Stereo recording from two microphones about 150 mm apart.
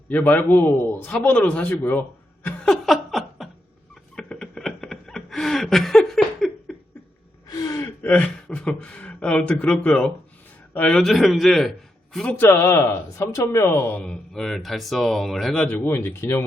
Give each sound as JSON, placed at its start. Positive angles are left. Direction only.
{"t": 0.1, "sound": "a man's voice", "side_deg": 15}
{"t": 4.1, "sound": "a sound", "side_deg": 5}
{"t": 7.5, "sound": "a man's voice", "side_deg": 20}